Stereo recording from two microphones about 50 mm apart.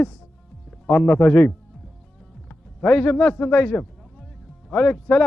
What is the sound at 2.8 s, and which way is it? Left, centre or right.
Speech, left.